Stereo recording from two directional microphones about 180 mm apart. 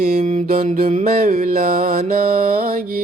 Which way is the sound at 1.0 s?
50° right (ahead or behind).